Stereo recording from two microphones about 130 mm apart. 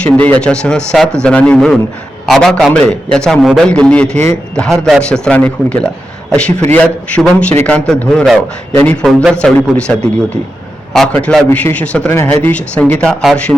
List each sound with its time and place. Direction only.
0.0 s a man's voice: 10° left (ahead or behind)
7.5 s speech: 15° left (ahead or behind)
7.9 s a man's voice: 5° left (ahead or behind)